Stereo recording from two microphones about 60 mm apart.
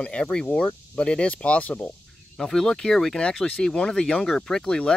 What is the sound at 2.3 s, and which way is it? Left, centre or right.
Speech, centre.